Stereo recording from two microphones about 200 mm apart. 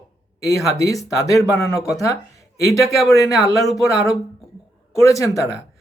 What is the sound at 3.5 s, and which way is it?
Speech, centre (ahead or behind).